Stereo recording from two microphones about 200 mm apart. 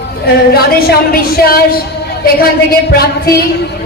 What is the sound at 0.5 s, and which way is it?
A woman's voice, 50° left (ahead or behind).